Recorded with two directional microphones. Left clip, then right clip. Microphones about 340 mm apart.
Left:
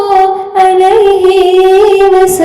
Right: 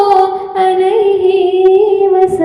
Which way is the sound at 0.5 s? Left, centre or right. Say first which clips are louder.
Left 6 dB; centre.